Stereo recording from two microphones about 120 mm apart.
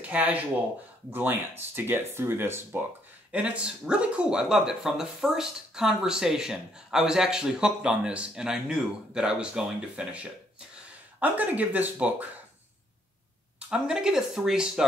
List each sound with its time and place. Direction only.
0.0 s speech: 15° right (ahead or behind)
13.6 s speech: 5° right (ahead or behind)